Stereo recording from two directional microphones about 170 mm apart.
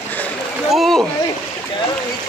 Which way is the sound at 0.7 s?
Centre (ahead or behind).